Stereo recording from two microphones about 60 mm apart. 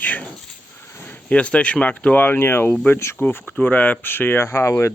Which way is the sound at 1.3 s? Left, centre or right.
Centre.